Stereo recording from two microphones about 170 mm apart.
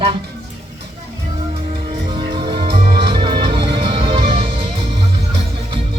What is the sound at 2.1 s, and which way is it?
Music, 30° right (ahead or behind).